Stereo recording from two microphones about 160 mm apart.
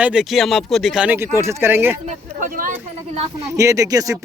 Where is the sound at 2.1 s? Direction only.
55° right (ahead or behind).